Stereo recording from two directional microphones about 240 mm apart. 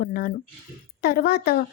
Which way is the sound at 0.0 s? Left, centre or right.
Left.